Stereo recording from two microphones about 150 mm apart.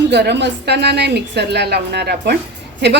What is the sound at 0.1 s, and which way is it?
A woman's voice, 90° right.